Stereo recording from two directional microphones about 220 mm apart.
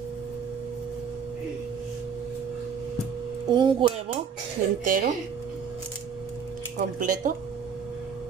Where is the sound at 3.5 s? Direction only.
20° right (ahead or behind).